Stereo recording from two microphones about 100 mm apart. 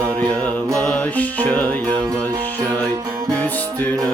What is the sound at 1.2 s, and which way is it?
Music, 15° left (ahead or behind).